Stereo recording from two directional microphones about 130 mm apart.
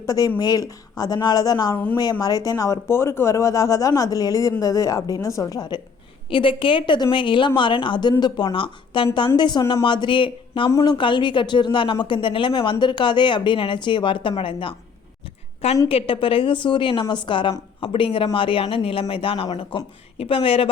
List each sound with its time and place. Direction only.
0.0 s speech: 25° left (ahead or behind)
6.3 s a woman's voice: 40° left (ahead or behind)
10.7 s speech: 25° left (ahead or behind)
10.9 s a woman's voice: 40° left (ahead or behind)
15.9 s a woman's voice: 45° left (ahead or behind)